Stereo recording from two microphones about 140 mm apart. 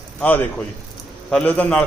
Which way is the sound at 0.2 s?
10° left (ahead or behind).